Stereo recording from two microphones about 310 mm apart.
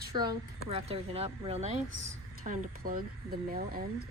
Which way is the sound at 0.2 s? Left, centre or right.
Centre.